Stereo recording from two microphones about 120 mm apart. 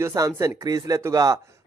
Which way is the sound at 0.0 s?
25° right (ahead or behind).